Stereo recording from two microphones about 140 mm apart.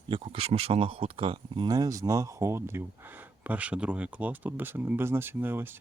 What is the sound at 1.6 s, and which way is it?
Speech, 25° right (ahead or behind).